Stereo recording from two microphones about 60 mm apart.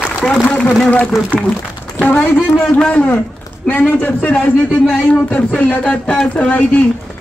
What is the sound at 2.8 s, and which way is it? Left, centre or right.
A man's voice, left.